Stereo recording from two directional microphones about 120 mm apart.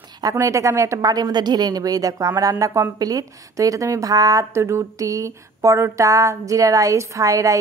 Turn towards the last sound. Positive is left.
turn(degrees=-30)  # may be behind; listen again after turning